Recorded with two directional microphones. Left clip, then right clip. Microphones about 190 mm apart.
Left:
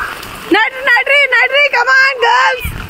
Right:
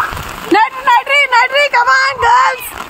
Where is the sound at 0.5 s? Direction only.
25° left (ahead or behind).